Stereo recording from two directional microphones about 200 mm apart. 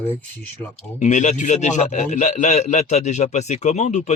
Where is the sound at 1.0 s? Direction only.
35° left (ahead or behind).